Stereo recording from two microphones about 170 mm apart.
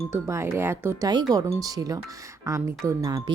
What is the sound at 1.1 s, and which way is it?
Speech, 25° right (ahead or behind).